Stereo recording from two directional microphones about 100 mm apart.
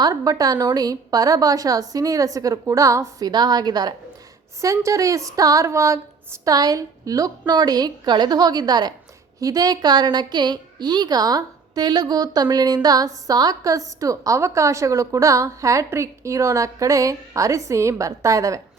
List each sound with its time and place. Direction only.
0.0 s a woman's voice: 35° right (ahead or behind)
4.6 s a woman's voice: 30° right (ahead or behind)